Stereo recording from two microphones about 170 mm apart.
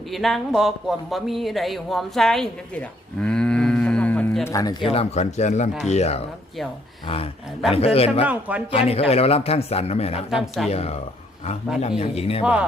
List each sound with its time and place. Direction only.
0.1 s speech: centre (ahead or behind); by 4.8 s 20° left (ahead or behind)
4.9 s speech: 40° left (ahead or behind)
7.9 s speech: 35° left (ahead or behind)
8.3 s speech: 10° right (ahead or behind)
8.7 s speech: 35° left (ahead or behind)
10.2 s speech: centre (ahead or behind)
10.7 s speech: 40° left (ahead or behind)
12.4 s speech: 5° right (ahead or behind)